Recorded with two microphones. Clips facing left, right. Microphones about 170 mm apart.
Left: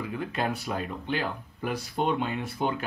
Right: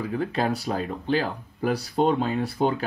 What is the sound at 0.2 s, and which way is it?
Speech, 35° right (ahead or behind).